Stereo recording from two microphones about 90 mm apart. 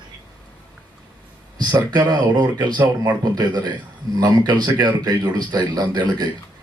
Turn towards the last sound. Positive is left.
turn(degrees=-50)  # may be behind; listen again after turning